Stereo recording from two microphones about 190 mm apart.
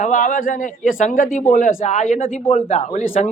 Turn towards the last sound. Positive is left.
turn(degrees=40)  # may be behind; listen again after turning